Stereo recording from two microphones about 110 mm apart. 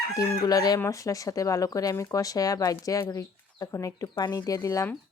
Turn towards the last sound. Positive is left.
turn(degrees=30)  # may be behind; listen again after turning